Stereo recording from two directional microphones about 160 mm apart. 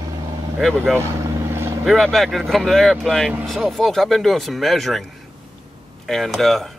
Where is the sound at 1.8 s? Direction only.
Centre (ahead or behind).